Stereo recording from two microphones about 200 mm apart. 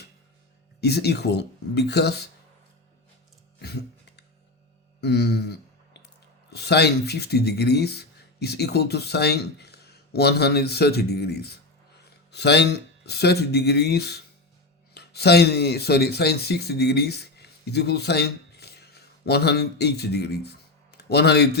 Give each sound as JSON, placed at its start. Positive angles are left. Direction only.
{"t": 0.8, "sound": "speech", "side_deg": 55}
{"t": 3.6, "sound": "music", "side_deg": 55}
{"t": 4.9, "sound": "a sound", "side_deg": 55}
{"t": 6.5, "sound": "speech", "side_deg": 55}